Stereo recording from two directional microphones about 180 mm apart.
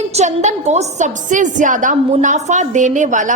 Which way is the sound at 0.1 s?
40° right (ahead or behind).